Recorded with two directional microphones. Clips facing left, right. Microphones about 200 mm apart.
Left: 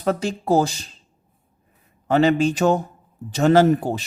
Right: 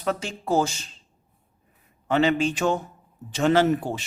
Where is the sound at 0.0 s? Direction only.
40° left (ahead or behind).